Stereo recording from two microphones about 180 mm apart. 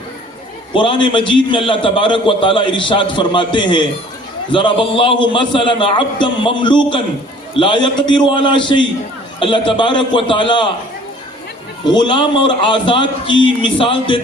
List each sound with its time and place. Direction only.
0.7 s a man's voice: 25° left (ahead or behind)
11.9 s a man's voice: 25° left (ahead or behind)